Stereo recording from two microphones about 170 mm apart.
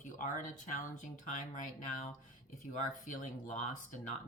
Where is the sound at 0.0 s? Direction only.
50° left (ahead or behind).